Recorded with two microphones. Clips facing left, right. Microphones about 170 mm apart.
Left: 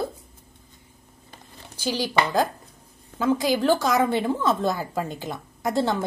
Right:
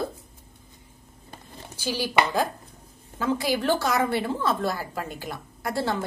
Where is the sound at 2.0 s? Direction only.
10° right (ahead or behind).